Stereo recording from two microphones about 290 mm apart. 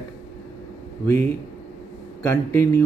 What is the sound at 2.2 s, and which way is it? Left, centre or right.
Speech, centre.